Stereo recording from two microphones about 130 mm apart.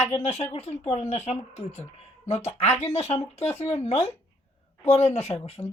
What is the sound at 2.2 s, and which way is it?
Speech, 55° left (ahead or behind).